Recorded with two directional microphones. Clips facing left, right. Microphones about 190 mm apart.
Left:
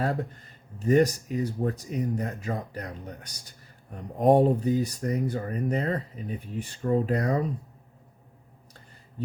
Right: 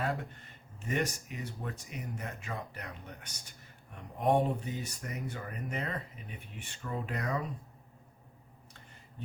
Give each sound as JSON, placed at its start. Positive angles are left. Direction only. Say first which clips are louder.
{"t": 0.0, "sound": "speech", "louder": "left 6 dB", "side_deg": 40}